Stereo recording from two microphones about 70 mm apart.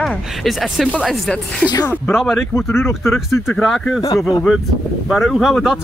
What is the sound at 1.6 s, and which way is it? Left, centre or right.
Speech, left.